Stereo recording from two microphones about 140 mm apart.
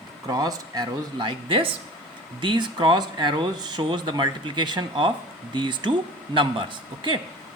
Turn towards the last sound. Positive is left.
turn(degrees=-35)  # may be behind; listen again after turning